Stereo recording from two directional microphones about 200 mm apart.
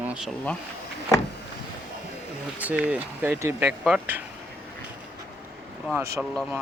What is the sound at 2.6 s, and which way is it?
Speech, 5° right (ahead or behind).